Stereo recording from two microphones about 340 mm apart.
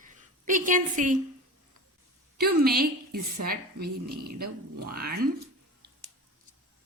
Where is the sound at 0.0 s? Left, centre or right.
Right.